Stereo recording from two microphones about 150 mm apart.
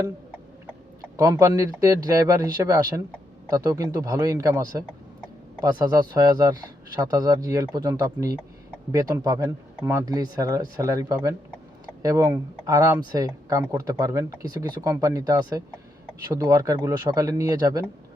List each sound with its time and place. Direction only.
1.1 s speech: 20° right (ahead or behind)
5.8 s speech: 25° right (ahead or behind)